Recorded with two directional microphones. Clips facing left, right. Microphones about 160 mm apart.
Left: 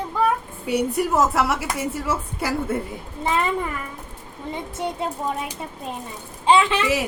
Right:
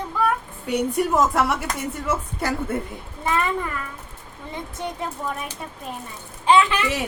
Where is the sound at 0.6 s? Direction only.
5° left (ahead or behind).